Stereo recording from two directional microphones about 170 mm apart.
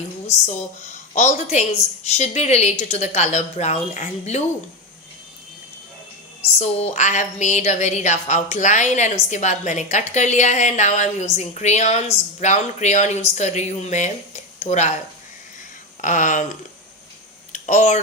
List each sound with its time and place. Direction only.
1.1 s a woman's voice: 45° left (ahead or behind)
6.6 s a woman's voice: 40° left (ahead or behind)
16.0 s a woman's voice: 50° left (ahead or behind)
17.5 s a sound: 45° left (ahead or behind)